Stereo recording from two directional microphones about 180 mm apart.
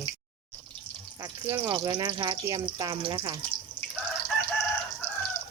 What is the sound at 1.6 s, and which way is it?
Speech, 25° right (ahead or behind).